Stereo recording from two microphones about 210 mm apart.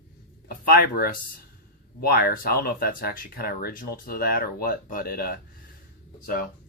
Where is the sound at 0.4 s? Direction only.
45° left (ahead or behind).